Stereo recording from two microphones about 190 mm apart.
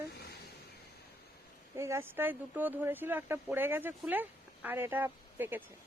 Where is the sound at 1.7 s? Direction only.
15° right (ahead or behind).